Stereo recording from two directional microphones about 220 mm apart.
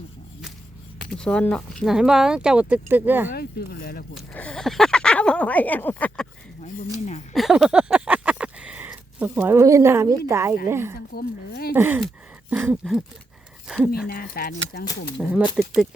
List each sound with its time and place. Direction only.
1.1 s speech: 5° left (ahead or behind)
3.2 s speech: 45° left (ahead or behind)
4.1 s speech: 5° left (ahead or behind)
7.3 s a sound: centre (ahead or behind)
10.7 s speech: 10° right (ahead or behind)
11.1 s speech: 45° left (ahead or behind)
11.7 s speech: 10° right (ahead or behind)
14.1 s speech: 45° left (ahead or behind)
15.2 s speech: 5° right (ahead or behind)